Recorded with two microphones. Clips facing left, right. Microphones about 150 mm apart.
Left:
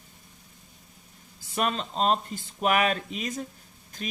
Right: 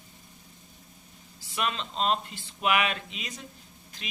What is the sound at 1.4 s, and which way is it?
Speech, 45° left (ahead or behind).